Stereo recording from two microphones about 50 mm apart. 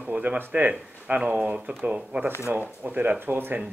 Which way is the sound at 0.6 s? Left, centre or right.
Right.